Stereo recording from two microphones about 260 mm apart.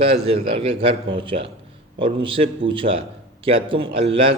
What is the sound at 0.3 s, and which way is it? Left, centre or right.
A man's voice, right.